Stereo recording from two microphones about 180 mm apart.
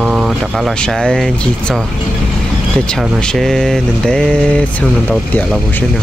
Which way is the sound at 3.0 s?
Centre (ahead or behind).